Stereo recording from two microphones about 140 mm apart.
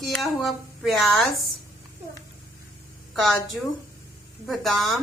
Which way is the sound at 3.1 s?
Centre (ahead or behind).